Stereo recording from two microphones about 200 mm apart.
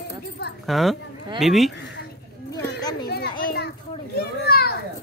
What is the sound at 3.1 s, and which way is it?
A child's voice, 55° left (ahead or behind).